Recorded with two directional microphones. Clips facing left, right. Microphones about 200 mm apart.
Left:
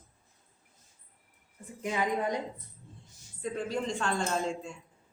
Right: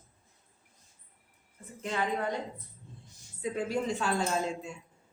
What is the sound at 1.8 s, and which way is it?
Speech, 10° left (ahead or behind).